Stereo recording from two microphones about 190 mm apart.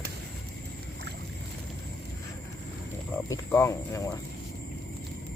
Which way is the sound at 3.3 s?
15° left (ahead or behind).